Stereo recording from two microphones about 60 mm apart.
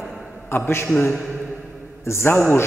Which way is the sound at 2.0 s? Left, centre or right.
Left.